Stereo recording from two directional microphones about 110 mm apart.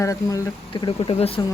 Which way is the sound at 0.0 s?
30° left (ahead or behind).